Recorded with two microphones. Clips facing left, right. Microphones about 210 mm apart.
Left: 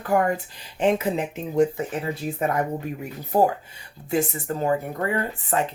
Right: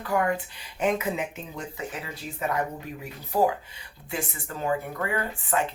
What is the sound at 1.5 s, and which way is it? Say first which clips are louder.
Speech: left 17 dB; 45° left (ahead or behind).